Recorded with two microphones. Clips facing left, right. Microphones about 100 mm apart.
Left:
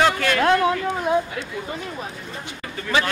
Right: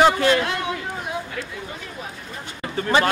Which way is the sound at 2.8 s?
40° right (ahead or behind).